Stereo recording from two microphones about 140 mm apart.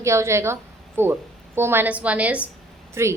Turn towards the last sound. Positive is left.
turn(degrees=-20)  # may be behind; listen again after turning